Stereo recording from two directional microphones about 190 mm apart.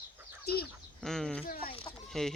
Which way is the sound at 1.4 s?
50° left (ahead or behind).